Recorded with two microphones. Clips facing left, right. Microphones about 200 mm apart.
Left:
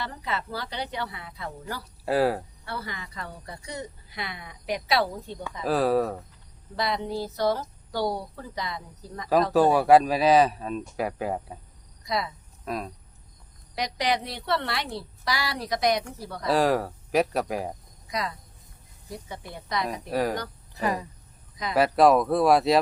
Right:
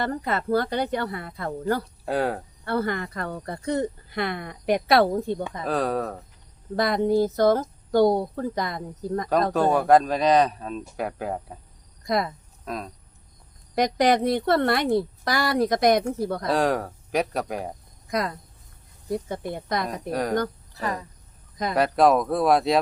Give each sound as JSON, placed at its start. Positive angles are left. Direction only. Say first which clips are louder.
{"t": 0.0, "sound": "speech", "louder": "right 6 dB", "side_deg": -50}
{"t": 2.0, "sound": "speech", "louder": "left 2 dB", "side_deg": 5}
{"t": 2.6, "sound": "speech", "louder": "right 13 dB", "side_deg": -55}
{"t": 5.6, "sound": "speech", "louder": "left 3 dB", "side_deg": 5}
{"t": 6.7, "sound": "speech", "louder": "right 8 dB", "side_deg": -50}
{"t": 9.5, "sound": "speech", "louder": "left 1 dB", "side_deg": 5}
{"t": 12.0, "sound": "speech", "louder": "right 5 dB", "side_deg": -50}
{"t": 12.6, "sound": "speech", "louder": "left 1 dB", "side_deg": 0}
{"t": 13.7, "sound": "speech", "louder": "right 7 dB", "side_deg": -50}
{"t": 16.5, "sound": "speech", "louder": "left 2 dB", "side_deg": 0}
{"t": 18.1, "sound": "speech", "louder": "right 5 dB", "side_deg": -50}
{"t": 19.9, "sound": "speech", "louder": "even", "side_deg": 5}
{"t": 20.8, "sound": "speech", "louder": "left 2 dB", "side_deg": 15}
{"t": 21.8, "sound": "speech", "louder": "even", "side_deg": 0}